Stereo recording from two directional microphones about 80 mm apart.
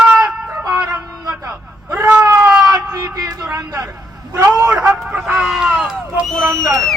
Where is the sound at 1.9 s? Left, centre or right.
Centre.